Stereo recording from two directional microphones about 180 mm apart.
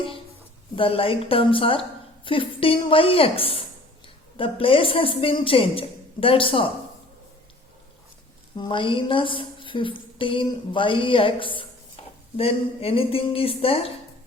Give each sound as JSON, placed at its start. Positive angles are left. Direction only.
{"t": 0.8, "sound": "a woman's voice", "side_deg": 30}
{"t": 8.5, "sound": "a woman's voice", "side_deg": 25}